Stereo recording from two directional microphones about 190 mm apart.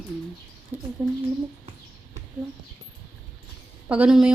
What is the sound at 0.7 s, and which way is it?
Speech, 10° right (ahead or behind).